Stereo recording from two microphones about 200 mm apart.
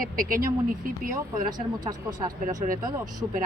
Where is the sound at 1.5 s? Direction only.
20° right (ahead or behind).